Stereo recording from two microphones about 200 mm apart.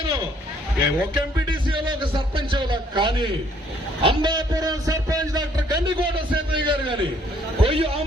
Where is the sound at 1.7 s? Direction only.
25° right (ahead or behind).